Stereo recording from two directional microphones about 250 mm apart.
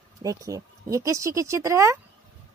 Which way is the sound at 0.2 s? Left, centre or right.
Centre.